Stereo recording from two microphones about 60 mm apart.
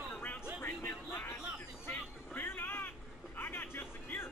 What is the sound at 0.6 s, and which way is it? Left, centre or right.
Music, left.